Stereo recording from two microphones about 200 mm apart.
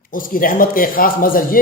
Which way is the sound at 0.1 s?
45° left (ahead or behind).